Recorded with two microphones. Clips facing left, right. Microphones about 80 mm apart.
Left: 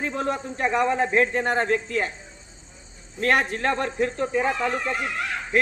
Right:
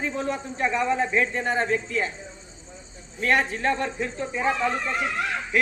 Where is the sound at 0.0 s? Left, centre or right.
Left.